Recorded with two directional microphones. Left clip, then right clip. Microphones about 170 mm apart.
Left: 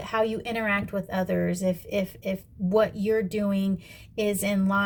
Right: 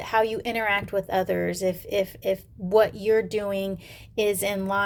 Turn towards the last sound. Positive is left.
turn(degrees=-30)  # may be behind; listen again after turning